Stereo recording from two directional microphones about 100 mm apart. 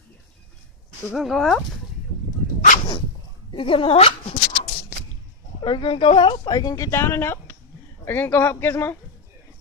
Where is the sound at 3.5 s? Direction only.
60° left (ahead or behind).